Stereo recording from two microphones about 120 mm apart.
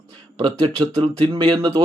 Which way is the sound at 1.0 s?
50° right (ahead or behind).